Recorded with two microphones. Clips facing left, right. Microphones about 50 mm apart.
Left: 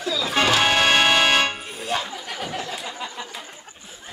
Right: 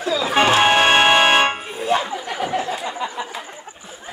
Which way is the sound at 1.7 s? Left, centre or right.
Centre.